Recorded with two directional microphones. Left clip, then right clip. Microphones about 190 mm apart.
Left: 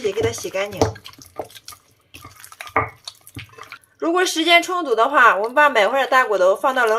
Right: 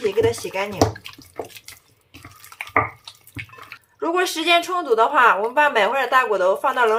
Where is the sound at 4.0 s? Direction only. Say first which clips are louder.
Left 2 dB; 15° left (ahead or behind).